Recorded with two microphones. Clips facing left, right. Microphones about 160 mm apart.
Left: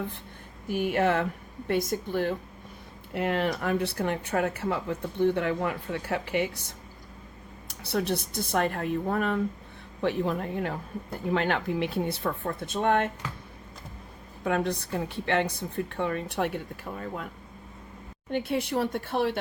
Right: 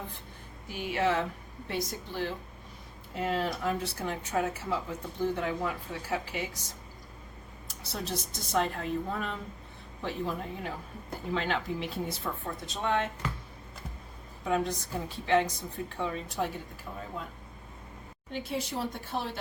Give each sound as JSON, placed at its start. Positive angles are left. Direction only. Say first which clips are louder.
{"t": 0.7, "sound": "speech", "louder": "left 4 dB", "side_deg": 50}
{"t": 3.2, "sound": "speech", "louder": "left 4 dB", "side_deg": 65}
{"t": 14.4, "sound": "speech", "louder": "left 2 dB", "side_deg": 65}
{"t": 18.3, "sound": "speech", "louder": "left 6 dB", "side_deg": 60}